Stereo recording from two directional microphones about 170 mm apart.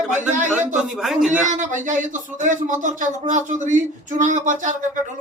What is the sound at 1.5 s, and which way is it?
Speech, 45° right (ahead or behind).